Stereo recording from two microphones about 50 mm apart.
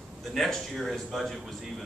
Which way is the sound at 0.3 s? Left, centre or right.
Centre.